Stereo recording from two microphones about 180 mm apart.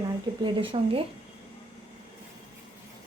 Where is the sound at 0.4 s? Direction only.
30° right (ahead or behind).